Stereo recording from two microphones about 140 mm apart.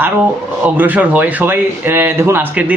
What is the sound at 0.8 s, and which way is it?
Speech, 10° right (ahead or behind).